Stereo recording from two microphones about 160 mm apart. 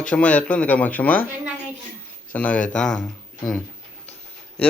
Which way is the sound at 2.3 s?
10° left (ahead or behind).